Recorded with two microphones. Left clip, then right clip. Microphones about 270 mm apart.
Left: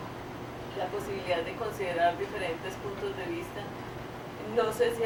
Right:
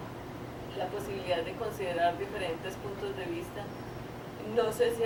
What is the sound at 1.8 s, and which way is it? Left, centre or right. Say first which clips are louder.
Speech: left 2 dB; centre.